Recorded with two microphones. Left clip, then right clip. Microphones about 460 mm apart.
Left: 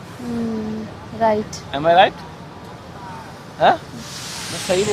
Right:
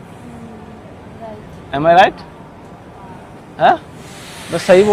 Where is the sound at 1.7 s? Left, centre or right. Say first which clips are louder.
Right 4 dB; right.